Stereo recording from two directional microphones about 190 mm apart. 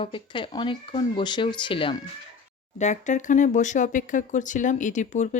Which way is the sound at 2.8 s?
40° left (ahead or behind).